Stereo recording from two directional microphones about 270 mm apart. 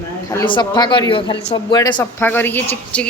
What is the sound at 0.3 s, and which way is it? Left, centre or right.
Speech, centre.